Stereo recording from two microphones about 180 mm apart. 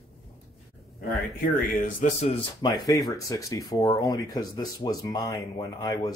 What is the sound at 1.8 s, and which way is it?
Speech, 40° left (ahead or behind).